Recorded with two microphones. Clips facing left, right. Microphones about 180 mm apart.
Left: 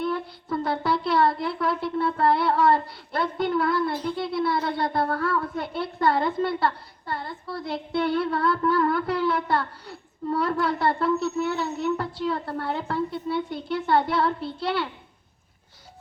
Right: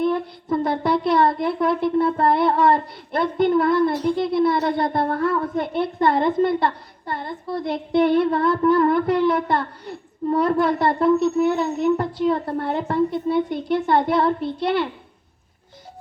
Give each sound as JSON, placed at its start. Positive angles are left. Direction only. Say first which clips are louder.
{"t": 0.1, "sound": "speech", "louder": "right 6 dB", "side_deg": -20}
{"t": 4.2, "sound": "a sound", "louder": "right 7 dB", "side_deg": -20}
{"t": 4.8, "sound": "a woman's voice", "louder": "right 4 dB", "side_deg": -20}